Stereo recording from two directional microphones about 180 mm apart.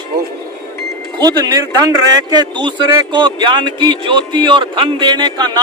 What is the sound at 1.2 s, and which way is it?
Speech, 25° right (ahead or behind).